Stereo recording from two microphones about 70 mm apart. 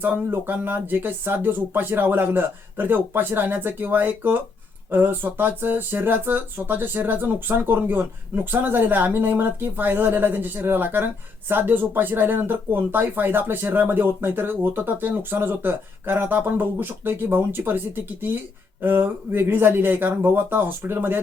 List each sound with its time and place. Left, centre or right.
0.0 s speech: right